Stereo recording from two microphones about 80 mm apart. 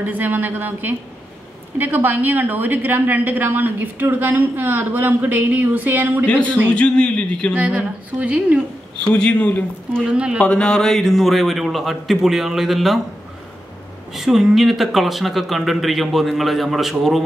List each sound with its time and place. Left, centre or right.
0.0 s a woman's voice: right
6.2 s a man's voice: centre
7.5 s a woman's voice: centre
9.1 s a man's voice: centre
10.0 s a woman's voice: centre
10.4 s speech: centre
14.1 s speech: centre